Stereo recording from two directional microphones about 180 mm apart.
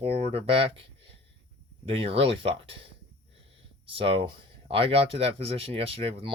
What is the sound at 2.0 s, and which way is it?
Speech, 30° right (ahead or behind).